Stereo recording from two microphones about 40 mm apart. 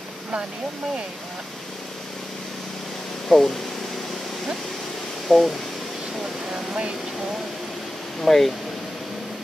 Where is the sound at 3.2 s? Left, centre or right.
Centre.